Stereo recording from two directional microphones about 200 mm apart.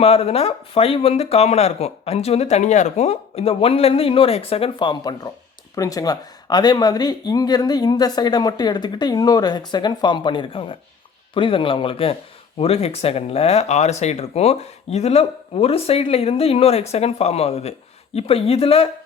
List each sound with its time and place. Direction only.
0.0 s speech: 30° left (ahead or behind)